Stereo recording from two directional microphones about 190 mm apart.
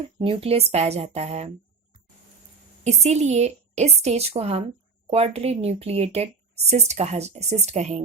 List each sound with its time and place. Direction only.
0.2 s a woman's voice: 30° right (ahead or behind)
2.8 s a woman's voice: 35° right (ahead or behind)